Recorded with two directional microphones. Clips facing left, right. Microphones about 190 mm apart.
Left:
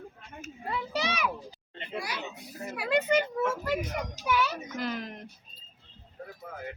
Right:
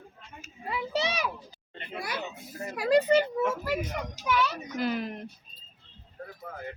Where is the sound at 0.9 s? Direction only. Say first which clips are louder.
Right 2 dB; 30° right (ahead or behind).